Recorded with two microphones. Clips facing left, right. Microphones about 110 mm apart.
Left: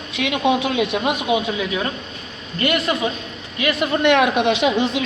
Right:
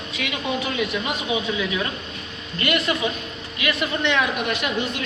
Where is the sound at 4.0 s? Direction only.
65° left (ahead or behind); by 4.9 s 90° left.